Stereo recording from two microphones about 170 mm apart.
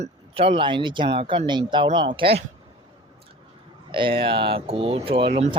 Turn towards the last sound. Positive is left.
turn(degrees=-35)  # may be behind; listen again after turning